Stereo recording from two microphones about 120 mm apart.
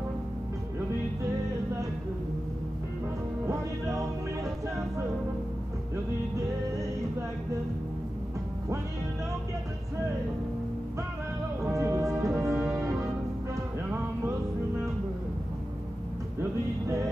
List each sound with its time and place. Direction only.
3.4 s music: 25° right (ahead or behind)
11.6 s music: 25° right (ahead or behind)